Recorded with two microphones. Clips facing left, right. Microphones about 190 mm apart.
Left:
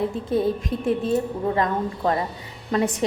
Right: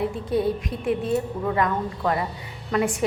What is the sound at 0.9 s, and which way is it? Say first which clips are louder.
A woman's voice: left 1 dB; 25° left (ahead or behind).